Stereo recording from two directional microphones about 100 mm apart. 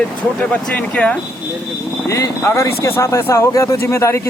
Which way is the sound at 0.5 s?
15° left (ahead or behind).